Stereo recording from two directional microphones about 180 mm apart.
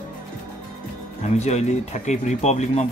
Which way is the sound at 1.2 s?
40° left (ahead or behind).